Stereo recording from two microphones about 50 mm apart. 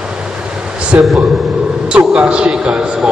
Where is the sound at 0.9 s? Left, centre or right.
Right.